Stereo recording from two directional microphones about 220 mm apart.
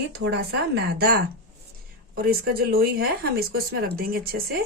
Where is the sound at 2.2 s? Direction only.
45° right (ahead or behind).